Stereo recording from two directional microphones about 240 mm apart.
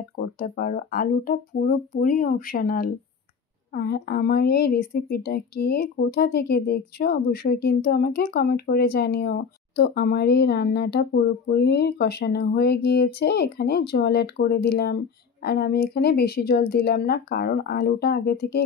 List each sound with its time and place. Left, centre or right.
0.2 s a woman's voice: left